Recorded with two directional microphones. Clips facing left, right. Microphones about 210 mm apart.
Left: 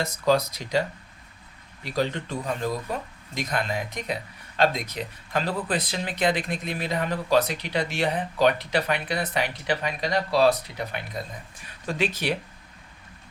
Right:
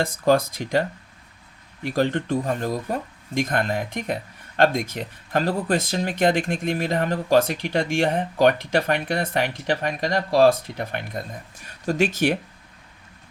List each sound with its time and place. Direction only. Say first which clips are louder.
0.0 s speech: right 3 dB; 50° right (ahead or behind)